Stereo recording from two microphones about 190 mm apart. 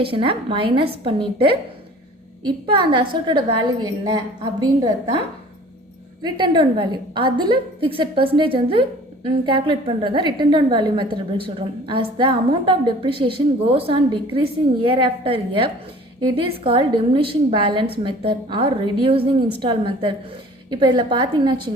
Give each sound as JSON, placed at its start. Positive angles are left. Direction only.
{"t": 0.0, "sound": "a woman's voice", "side_deg": -25}
{"t": 6.2, "sound": "a woman's voice", "side_deg": -25}